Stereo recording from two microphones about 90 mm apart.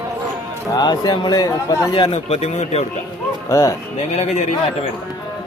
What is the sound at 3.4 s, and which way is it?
Speech, 35° left (ahead or behind).